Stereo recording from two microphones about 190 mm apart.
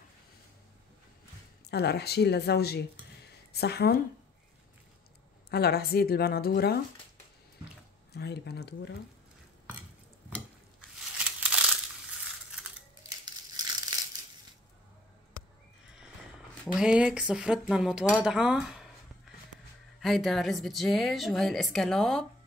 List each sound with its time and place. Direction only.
1.7 s a woman's voice: 60° left (ahead or behind)
5.5 s a woman's voice: 55° left (ahead or behind)
8.1 s a woman's voice: 60° left (ahead or behind)
11.1 s crumpling: 5° right (ahead or behind)
13.2 s crushing: 25° right (ahead or behind)
16.6 s a woman's voice: 5° right (ahead or behind)
20.0 s a woman's voice: centre (ahead or behind)